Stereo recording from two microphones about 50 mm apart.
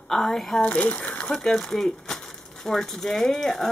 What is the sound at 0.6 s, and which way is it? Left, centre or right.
Speech, left.